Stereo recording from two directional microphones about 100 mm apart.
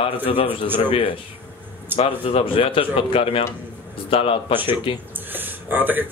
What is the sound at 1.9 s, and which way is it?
A man's voice, 70° left (ahead or behind).